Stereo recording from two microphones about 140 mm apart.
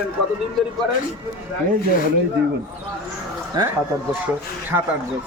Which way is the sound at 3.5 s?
30° right (ahead or behind).